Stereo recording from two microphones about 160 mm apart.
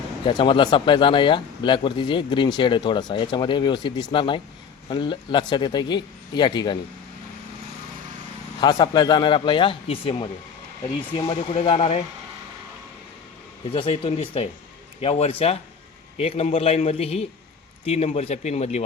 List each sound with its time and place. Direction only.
0.3 s speech: 30° left (ahead or behind)
8.6 s speech: 25° left (ahead or behind)
13.7 s speech: 35° left (ahead or behind)